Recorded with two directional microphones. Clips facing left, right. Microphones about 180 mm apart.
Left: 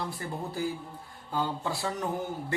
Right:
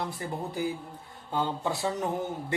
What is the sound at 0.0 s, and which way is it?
Speech, 20° right (ahead or behind).